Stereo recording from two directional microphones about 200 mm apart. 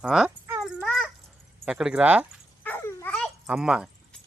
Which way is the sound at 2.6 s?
10° left (ahead or behind).